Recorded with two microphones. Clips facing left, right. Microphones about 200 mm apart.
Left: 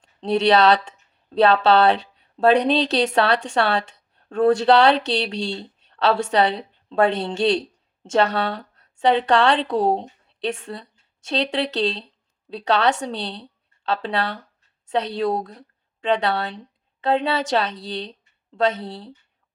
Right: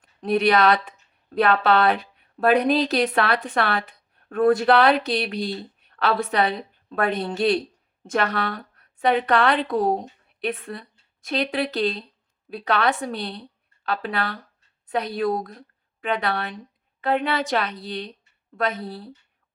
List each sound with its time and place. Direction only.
0.0 s a woman's voice: 30° left (ahead or behind)